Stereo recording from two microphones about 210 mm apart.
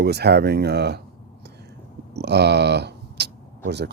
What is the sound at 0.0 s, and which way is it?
Speech, 50° right (ahead or behind).